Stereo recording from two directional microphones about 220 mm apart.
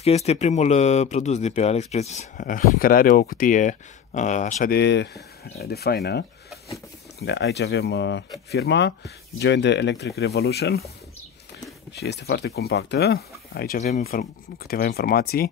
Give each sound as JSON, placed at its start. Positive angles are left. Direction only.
{"t": 0.0, "sound": "speech", "side_deg": 30}
{"t": 11.9, "sound": "speech", "side_deg": 50}